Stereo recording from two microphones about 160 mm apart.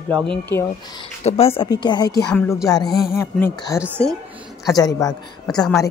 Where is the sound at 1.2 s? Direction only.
40° left (ahead or behind).